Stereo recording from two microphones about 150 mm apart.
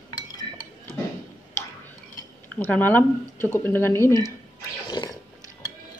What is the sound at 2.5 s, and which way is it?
Speech, 15° left (ahead or behind).